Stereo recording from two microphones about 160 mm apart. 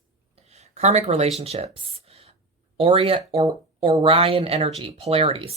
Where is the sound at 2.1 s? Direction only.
40° right (ahead or behind).